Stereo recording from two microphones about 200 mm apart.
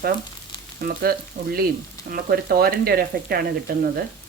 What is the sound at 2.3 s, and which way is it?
Speech, 50° right (ahead or behind).